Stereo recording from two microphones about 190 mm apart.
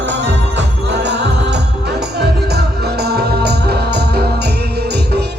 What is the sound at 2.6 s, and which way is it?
Music, 60° right (ahead or behind).